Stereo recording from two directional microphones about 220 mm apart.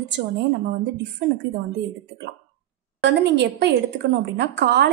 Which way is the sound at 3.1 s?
50° right (ahead or behind).